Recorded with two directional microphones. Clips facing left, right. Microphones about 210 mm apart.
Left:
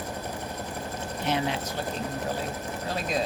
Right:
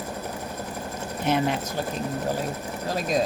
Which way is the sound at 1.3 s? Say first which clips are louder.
Right 4 dB; 45° right (ahead or behind).